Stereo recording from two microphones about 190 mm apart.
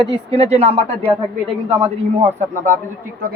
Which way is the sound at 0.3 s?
30° right (ahead or behind).